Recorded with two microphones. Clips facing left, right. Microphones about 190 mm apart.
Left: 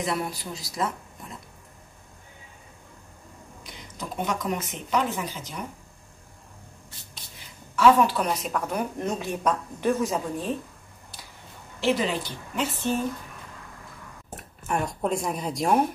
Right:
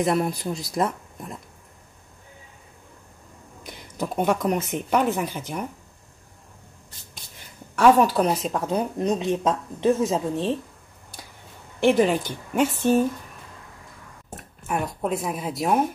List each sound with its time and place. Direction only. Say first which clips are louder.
0.3 s speech: right 7 dB; centre (ahead or behind)
3.6 s speech: right 8 dB; 55° right (ahead or behind)
7.7 s a woman's voice: right 2 dB; 45° right (ahead or behind); by 10.6 s 25° right (ahead or behind)
11.8 s a woman's voice: right 6 dB; 50° right (ahead or behind)
14.7 s speech: right 1 dB; centre (ahead or behind)